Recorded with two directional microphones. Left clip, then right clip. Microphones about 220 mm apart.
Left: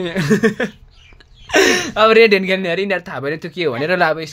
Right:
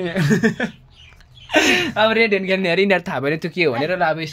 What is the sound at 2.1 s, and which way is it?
Speech, 40° left (ahead or behind).